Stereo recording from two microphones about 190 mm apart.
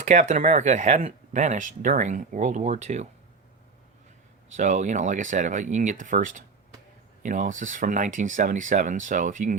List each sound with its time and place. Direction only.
0.0 s speech: 40° right (ahead or behind)
4.5 s speech: 40° right (ahead or behind)